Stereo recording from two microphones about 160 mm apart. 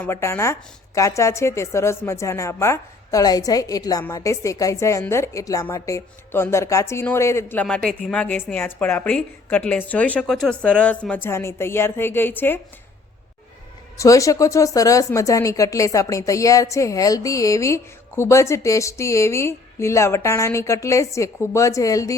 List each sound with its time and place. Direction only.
0.0 s a woman's voice: 15° left (ahead or behind)
14.0 s speech: 20° left (ahead or behind)